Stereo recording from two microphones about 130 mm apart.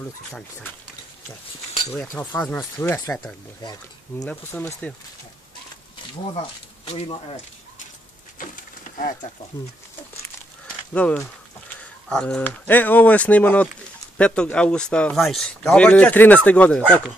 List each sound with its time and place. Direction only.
1.9 s speech: 10° left (ahead or behind)
2.6 s speech: 20° left (ahead or behind)
4.5 s speech: 15° left (ahead or behind)
6.3 s speech: 45° left (ahead or behind)
10.9 s speech: 10° left (ahead or behind)